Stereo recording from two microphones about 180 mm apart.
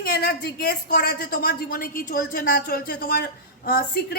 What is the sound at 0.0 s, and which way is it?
A woman's voice, 60° left (ahead or behind).